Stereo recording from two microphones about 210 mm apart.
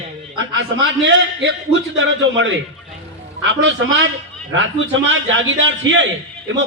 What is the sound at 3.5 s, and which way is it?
A man's voice, 60° right (ahead or behind).